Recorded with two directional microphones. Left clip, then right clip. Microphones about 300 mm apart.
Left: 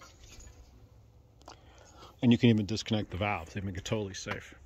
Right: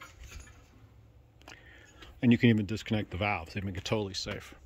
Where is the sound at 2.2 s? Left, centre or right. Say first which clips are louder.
Even; centre.